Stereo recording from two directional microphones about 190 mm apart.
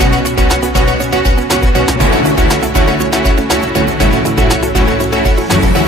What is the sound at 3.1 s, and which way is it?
Music, centre (ahead or behind).